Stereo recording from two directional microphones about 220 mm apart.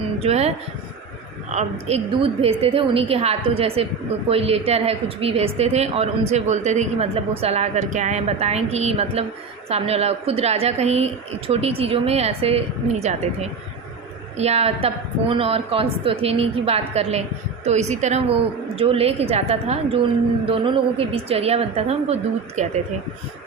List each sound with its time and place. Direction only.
0.2 s a woman's voice: 30° right (ahead or behind)
14.3 s a woman's voice: 30° right (ahead or behind)